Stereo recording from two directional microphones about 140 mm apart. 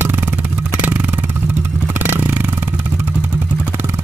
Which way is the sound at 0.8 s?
15° right (ahead or behind).